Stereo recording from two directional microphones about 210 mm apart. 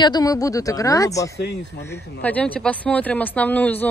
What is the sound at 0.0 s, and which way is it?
Speech, 20° left (ahead or behind).